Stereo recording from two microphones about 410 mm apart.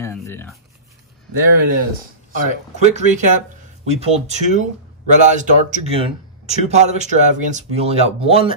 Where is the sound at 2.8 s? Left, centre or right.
Centre.